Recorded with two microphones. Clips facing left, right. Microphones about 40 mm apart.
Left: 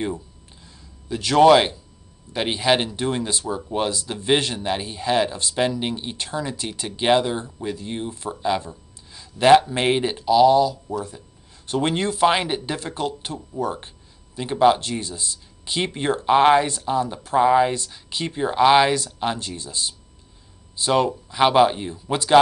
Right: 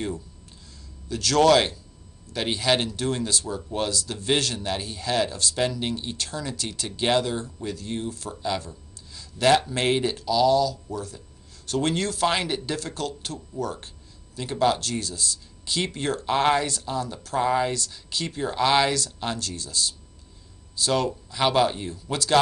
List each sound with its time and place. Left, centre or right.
1.0 s speech: left